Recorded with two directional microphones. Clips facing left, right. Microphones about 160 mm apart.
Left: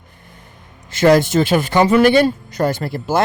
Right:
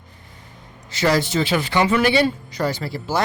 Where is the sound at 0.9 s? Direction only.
50° left (ahead or behind).